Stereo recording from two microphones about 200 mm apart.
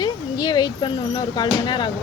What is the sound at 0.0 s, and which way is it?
Speech, 20° left (ahead or behind).